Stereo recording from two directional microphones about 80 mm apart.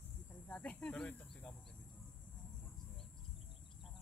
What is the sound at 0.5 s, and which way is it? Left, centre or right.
Speech, centre.